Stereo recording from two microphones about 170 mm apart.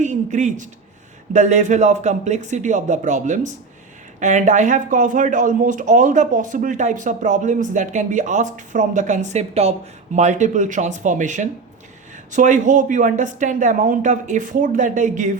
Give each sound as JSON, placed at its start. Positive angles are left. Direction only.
{"t": 0.0, "sound": "speech", "side_deg": -45}